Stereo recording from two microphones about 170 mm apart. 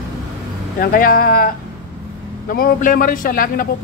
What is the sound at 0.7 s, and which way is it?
Speech, 55° left (ahead or behind).